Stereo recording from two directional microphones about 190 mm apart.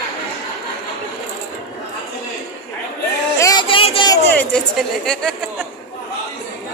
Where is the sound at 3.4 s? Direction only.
20° left (ahead or behind).